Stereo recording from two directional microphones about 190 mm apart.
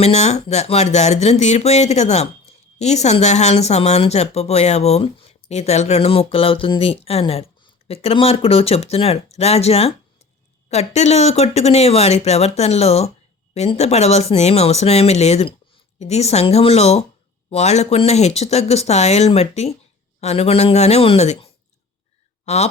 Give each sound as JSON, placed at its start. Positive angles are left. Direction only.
{"t": 0.0, "sound": "speech", "side_deg": 35}